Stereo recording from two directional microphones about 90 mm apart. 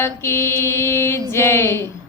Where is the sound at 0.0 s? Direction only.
30° left (ahead or behind).